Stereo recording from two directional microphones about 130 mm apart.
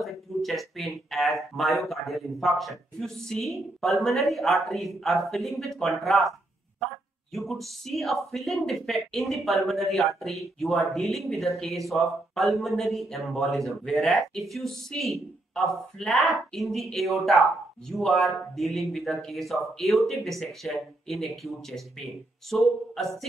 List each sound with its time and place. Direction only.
0.0 s speech: centre (ahead or behind)
7.3 s speech: centre (ahead or behind)